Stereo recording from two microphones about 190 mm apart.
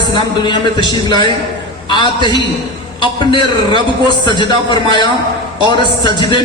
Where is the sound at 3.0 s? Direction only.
25° left (ahead or behind).